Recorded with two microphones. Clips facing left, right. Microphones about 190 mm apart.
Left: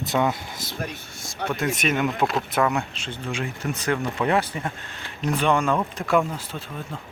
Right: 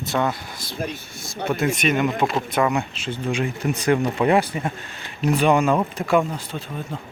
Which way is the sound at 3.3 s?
15° right (ahead or behind).